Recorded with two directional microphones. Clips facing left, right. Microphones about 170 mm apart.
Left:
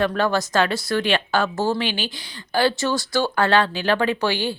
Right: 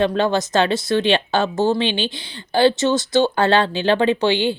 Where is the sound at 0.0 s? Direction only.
20° right (ahead or behind).